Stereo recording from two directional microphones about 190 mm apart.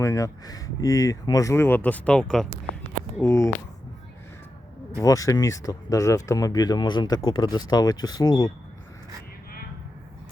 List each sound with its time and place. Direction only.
0.0 s speech: 15° left (ahead or behind)
4.9 s speech: 15° left (ahead or behind)